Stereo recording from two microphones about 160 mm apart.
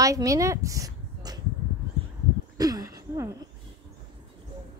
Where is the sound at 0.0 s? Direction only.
20° right (ahead or behind).